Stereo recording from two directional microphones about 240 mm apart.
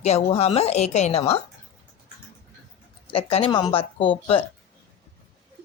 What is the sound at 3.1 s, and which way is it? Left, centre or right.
A woman's voice, left.